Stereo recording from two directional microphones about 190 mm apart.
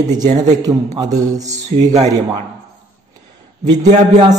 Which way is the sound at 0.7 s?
20° right (ahead or behind).